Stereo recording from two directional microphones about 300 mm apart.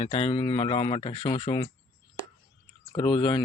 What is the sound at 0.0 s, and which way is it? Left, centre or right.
Speech, centre.